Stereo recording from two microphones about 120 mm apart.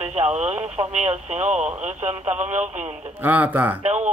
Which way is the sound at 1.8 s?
85° right.